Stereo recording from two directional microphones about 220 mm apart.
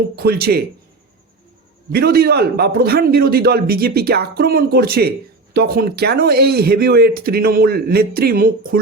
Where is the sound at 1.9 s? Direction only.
45° right (ahead or behind).